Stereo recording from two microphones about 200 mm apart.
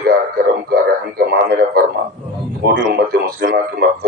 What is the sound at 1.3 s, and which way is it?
A man's voice, 50° right (ahead or behind).